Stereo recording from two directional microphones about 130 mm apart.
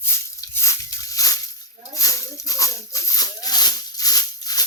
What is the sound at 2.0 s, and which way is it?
Maraca, 25° left (ahead or behind).